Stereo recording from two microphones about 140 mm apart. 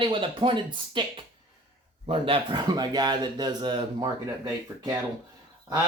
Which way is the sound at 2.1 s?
35° right (ahead or behind).